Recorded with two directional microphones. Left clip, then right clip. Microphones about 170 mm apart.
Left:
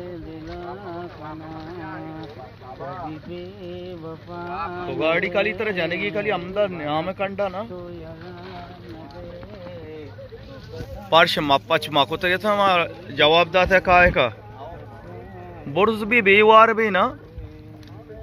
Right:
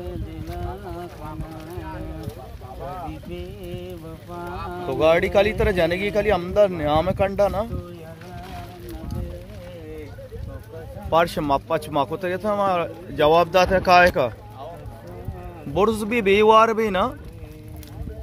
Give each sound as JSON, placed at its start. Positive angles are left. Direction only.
{"t": 4.8, "sound": "a man's voice", "side_deg": -30}
{"t": 11.1, "sound": "a man's voice", "side_deg": 0}
{"t": 15.7, "sound": "a man's voice", "side_deg": -20}